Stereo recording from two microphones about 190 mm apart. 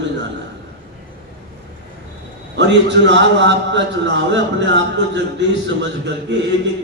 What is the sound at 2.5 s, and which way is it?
A man's voice, 65° right (ahead or behind).